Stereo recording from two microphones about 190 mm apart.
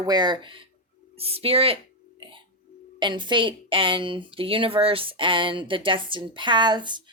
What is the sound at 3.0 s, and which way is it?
Speech, 25° right (ahead or behind).